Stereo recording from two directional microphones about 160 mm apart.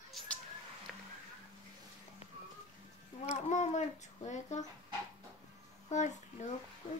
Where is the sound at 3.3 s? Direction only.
45° left (ahead or behind).